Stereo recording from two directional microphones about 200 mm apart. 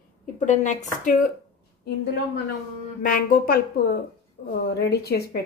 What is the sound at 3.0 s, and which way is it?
A woman's voice, 45° left (ahead or behind).